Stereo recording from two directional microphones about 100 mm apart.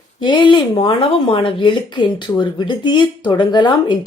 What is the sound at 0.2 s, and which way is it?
A woman's voice, 50° left (ahead or behind).